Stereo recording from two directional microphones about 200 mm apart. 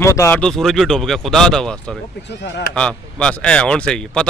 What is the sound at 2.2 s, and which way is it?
Speech, 60° left (ahead or behind).